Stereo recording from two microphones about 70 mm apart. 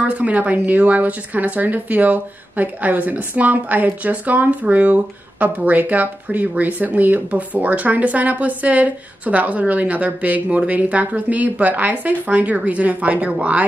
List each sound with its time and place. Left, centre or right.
0.0 s speech: right